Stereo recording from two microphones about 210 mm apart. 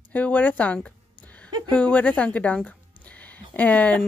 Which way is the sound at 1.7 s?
5° left (ahead or behind).